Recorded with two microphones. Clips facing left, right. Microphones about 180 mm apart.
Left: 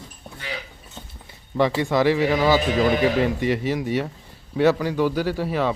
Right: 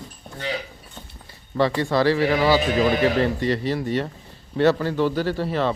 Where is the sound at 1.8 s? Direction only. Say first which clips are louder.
Even; 15° left (ahead or behind).